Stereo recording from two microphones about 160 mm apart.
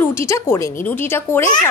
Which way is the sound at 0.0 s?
15° left (ahead or behind).